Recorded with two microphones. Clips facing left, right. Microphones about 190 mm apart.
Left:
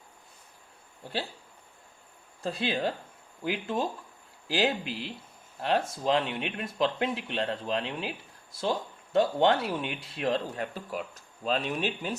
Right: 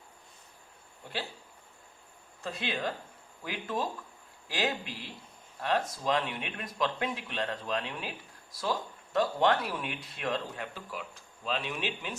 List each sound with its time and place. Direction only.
2.4 s speech: 35° left (ahead or behind)